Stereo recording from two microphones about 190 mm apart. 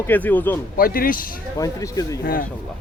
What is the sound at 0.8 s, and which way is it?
Speech, 50° left (ahead or behind).